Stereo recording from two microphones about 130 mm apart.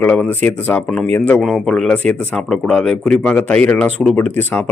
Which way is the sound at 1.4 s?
Centre (ahead or behind).